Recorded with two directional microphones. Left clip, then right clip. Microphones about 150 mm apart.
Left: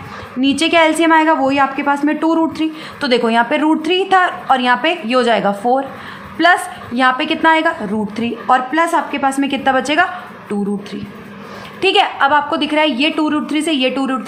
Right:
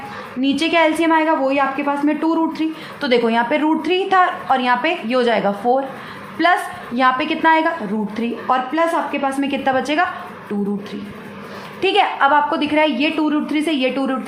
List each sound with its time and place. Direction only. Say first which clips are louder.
0.4 s a woman's voice: left 3 dB; 30° left (ahead or behind)
11.8 s a woman's voice: left 2 dB; 20° left (ahead or behind)